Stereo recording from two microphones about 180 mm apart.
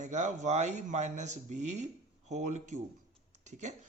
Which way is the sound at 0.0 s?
40° right (ahead or behind).